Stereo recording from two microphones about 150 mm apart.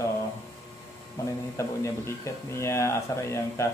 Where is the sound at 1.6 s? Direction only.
20° left (ahead or behind).